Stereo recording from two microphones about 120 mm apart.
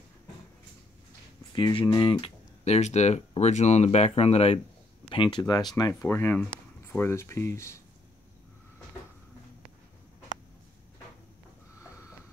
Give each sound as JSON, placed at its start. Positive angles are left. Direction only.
{"t": 1.5, "sound": "speech", "side_deg": 45}
{"t": 2.6, "sound": "speech", "side_deg": 65}
{"t": 5.1, "sound": "speech", "side_deg": 40}
{"t": 6.0, "sound": "speech", "side_deg": 20}
{"t": 11.8, "sound": "a sound", "side_deg": 25}